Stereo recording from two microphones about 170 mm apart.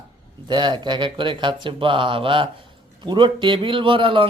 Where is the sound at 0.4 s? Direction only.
25° right (ahead or behind).